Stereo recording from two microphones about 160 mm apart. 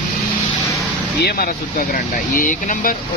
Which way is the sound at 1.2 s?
65° left (ahead or behind).